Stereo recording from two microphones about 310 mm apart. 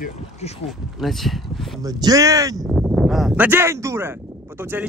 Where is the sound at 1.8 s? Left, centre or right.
Centre.